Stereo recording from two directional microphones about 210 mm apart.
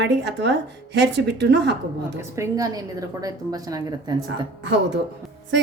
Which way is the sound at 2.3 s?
15° right (ahead or behind).